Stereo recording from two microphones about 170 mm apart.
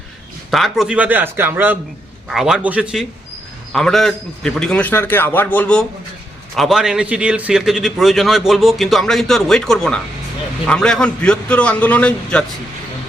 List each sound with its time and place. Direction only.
0.5 s a man's voice: centre (ahead or behind)